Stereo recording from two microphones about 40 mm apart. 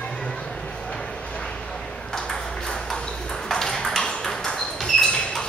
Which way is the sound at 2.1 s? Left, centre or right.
Centre.